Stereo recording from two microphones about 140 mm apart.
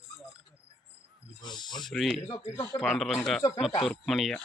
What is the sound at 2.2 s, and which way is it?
Speech, 20° left (ahead or behind).